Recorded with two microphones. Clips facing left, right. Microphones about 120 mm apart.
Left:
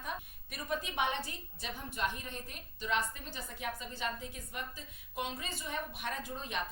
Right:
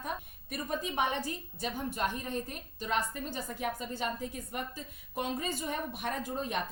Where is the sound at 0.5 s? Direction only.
40° right (ahead or behind).